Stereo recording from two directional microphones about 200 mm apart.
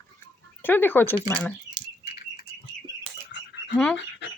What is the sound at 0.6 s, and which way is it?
Speech, 10° left (ahead or behind).